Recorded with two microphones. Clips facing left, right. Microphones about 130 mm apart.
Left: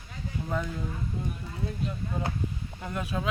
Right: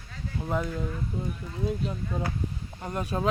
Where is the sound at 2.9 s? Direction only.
40° right (ahead or behind).